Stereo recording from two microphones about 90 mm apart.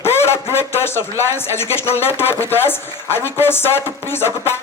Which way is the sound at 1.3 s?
25° left (ahead or behind).